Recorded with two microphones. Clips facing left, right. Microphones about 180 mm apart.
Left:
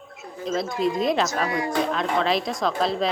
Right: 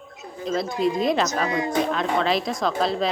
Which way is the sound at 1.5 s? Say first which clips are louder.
Right 1 dB; 20° right (ahead or behind).